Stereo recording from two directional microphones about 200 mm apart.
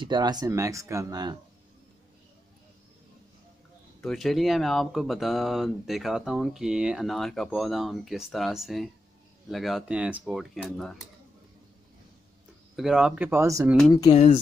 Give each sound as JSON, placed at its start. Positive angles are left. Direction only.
{"t": 0.0, "sound": "speech", "side_deg": -20}
{"t": 4.0, "sound": "speech", "side_deg": 0}
{"t": 12.7, "sound": "speech", "side_deg": 0}
{"t": 14.1, "sound": "speech", "side_deg": 35}